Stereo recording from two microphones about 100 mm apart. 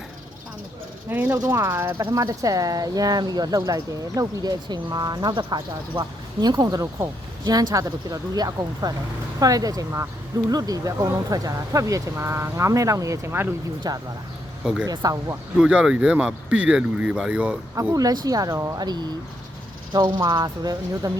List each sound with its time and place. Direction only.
1.1 s speech: 20° right (ahead or behind)
2.0 s speech: 45° right (ahead or behind); by 13.5 s 25° right (ahead or behind)
13.8 s speech: 40° right (ahead or behind)
14.6 s speech: 10° right (ahead or behind)
14.8 s speech: 40° right (ahead or behind)
15.6 s speech: 10° right (ahead or behind)
17.9 s speech: 40° right (ahead or behind)